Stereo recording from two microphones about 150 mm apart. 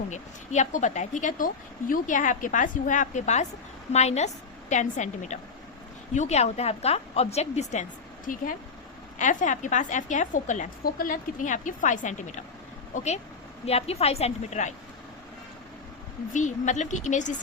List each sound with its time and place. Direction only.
0.1 s a woman's voice: 50° left (ahead or behind)
8.3 s a woman's voice: 65° left (ahead or behind)
10.8 s a woman's voice: 70° left (ahead or behind)
13.7 s a woman's voice: 45° left (ahead or behind)
16.3 s a woman's voice: 55° left (ahead or behind)